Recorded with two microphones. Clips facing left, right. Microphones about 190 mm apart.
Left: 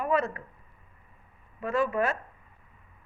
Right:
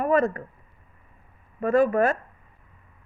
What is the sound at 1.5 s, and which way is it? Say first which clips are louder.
Speech: right 7 dB; 50° right (ahead or behind).